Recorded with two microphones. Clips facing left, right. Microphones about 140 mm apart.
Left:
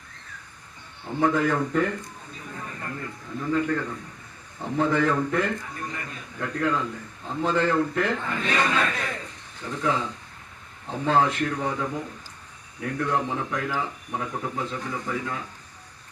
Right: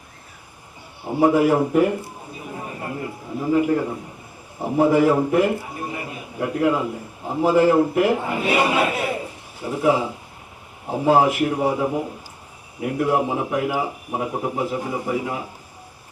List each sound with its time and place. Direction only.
1.1 s speech: 10° right (ahead or behind)
1.7 s a sound: 15° right (ahead or behind)
3.5 s speech: 15° right (ahead or behind)
5.1 s a man's voice: 20° right (ahead or behind)